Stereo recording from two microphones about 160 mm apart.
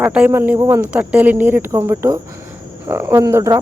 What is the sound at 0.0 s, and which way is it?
Speech, 10° right (ahead or behind).